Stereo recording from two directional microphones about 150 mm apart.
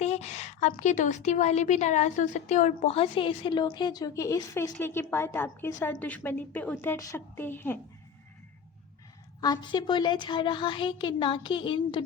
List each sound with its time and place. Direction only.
0.0 s a sound: 45° left (ahead or behind)
0.7 s a woman's voice: 55° left (ahead or behind); by 7.8 s 15° left (ahead or behind)
9.4 s a woman's voice: 30° left (ahead or behind)